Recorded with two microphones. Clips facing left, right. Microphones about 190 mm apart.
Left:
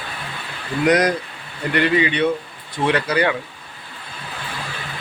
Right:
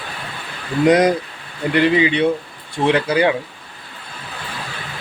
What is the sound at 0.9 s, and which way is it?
Speech, 25° right (ahead or behind).